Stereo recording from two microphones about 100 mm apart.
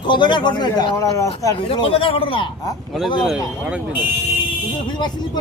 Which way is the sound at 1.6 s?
65° left (ahead or behind).